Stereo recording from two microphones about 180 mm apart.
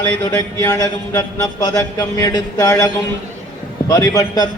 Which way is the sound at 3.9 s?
20° left (ahead or behind).